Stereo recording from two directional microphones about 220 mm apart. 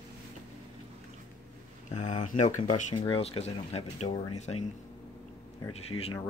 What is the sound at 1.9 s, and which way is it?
Speech, 30° left (ahead or behind).